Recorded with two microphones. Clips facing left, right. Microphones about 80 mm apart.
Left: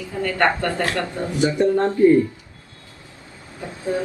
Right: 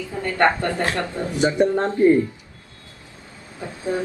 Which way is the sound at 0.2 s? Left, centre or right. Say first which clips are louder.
Right 1 dB; right.